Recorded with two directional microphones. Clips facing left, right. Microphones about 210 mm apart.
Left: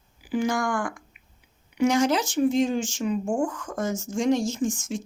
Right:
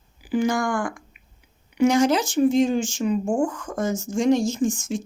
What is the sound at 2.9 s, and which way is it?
Speech, 30° right (ahead or behind).